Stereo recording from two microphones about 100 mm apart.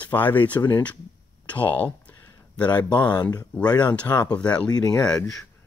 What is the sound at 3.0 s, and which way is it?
Speech, 45° left (ahead or behind).